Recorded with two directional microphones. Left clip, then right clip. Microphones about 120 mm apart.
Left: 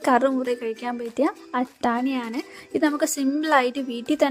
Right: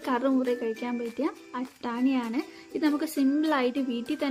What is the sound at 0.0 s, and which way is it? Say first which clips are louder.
Speech: left 7 dB; 60° left (ahead or behind).